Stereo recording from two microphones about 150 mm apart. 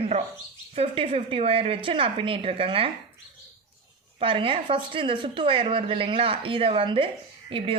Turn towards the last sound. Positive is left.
turn(degrees=-35)  # may be behind; listen again after turning